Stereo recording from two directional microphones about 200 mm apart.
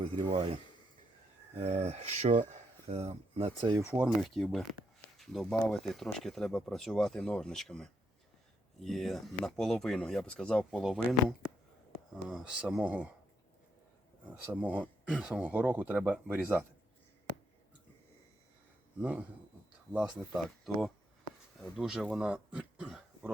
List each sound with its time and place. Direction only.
0.0 s speech: 30° right (ahead or behind)
3.8 s speech: 15° right (ahead or behind)
4.2 s speech: centre (ahead or behind)
14.3 s speech: 10° right (ahead or behind)
19.9 s speech: 5° right (ahead or behind)